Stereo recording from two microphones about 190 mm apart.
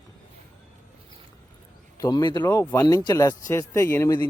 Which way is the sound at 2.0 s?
20° left (ahead or behind).